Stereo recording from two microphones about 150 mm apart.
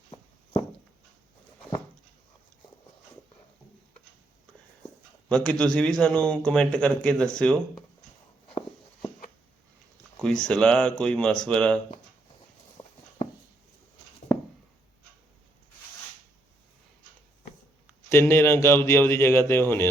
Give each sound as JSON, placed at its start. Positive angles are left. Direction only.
{"t": 5.3, "sound": "a man's voice", "side_deg": 5}
{"t": 10.4, "sound": "a man's voice", "side_deg": 5}
{"t": 12.8, "sound": "a sound", "side_deg": 25}
{"t": 18.1, "sound": "a man's voice", "side_deg": 15}